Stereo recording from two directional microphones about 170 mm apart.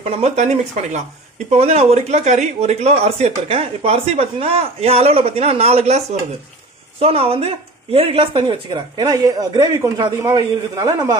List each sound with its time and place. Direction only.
0.1 s speech: 40° right (ahead or behind); by 11.1 s 20° right (ahead or behind)